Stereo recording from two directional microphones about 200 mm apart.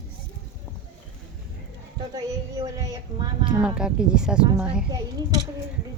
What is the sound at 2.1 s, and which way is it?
Speech, 15° right (ahead or behind).